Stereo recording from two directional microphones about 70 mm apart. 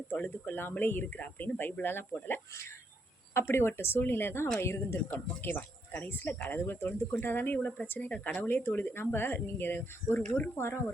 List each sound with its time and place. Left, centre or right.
0.1 s speech: left
5.4 s speech: left